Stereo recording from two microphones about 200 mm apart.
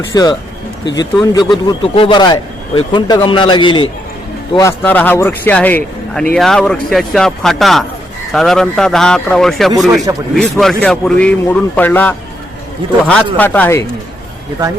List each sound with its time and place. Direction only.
0.1 s a man's voice: 20° left (ahead or behind)
4.8 s a man's voice: 10° left (ahead or behind)
9.9 s speech: 15° right (ahead or behind)
10.3 s a man's voice: centre (ahead or behind)
13.3 s speech: 10° left (ahead or behind)